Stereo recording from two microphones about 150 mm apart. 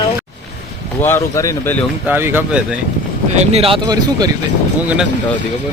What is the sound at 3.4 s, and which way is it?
Speech, 45° right (ahead or behind).